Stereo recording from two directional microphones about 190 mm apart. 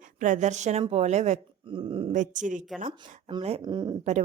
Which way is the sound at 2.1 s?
40° right (ahead or behind).